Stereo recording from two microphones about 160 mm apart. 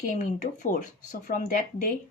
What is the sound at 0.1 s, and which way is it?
Speech, 50° left (ahead or behind).